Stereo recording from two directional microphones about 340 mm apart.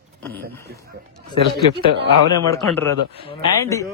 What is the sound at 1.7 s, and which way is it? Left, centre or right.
Speech, right.